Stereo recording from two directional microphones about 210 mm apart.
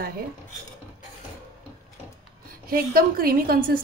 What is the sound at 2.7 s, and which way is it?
Speech, 45° right (ahead or behind).